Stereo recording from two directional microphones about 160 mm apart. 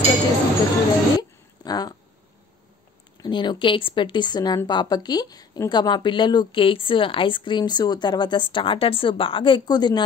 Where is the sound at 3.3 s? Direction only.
30° left (ahead or behind).